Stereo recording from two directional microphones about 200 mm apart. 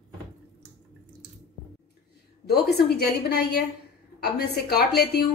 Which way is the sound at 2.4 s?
50° left (ahead or behind).